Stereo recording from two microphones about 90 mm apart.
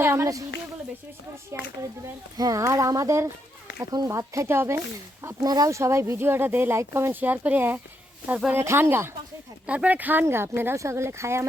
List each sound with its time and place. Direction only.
0.0 s a sound: 25° right (ahead or behind)
1.5 s speech: 30° right (ahead or behind)
3.8 s speech: 50° right (ahead or behind)
4.1 s speech: 35° right (ahead or behind)
5.2 s speech: 45° right (ahead or behind); by 9.1 s 25° right (ahead or behind)
9.6 s speech: 15° right (ahead or behind)